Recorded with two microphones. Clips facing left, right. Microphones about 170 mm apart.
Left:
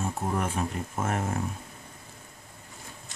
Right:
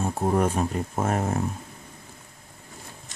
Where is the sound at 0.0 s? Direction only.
35° right (ahead or behind).